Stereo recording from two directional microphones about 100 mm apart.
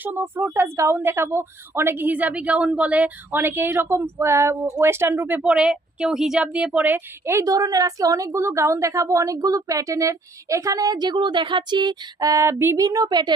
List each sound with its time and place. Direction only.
0.0 s a woman's voice: 20° right (ahead or behind)
5.5 s a woman's voice: 10° right (ahead or behind); by 12.7 s 25° right (ahead or behind)
12.7 s a woman's voice: 40° right (ahead or behind)